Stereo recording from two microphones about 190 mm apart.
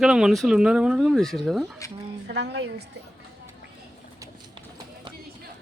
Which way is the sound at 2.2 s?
65° right (ahead or behind).